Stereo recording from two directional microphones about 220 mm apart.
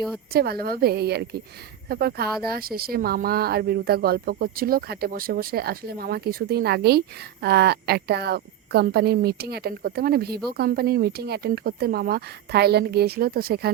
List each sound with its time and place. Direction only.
0.3 s speech: 45° right (ahead or behind)